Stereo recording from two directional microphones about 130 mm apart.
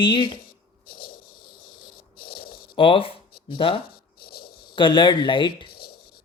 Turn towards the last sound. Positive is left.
turn(degrees=35)  # may be behind; listen again after turning